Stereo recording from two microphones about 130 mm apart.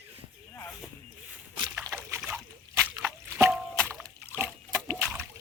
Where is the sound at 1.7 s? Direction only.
15° right (ahead or behind).